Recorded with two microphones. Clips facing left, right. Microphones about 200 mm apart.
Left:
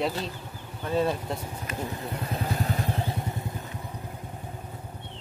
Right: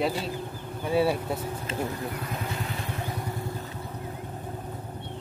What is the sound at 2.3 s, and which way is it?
Vehicle, 35° left (ahead or behind).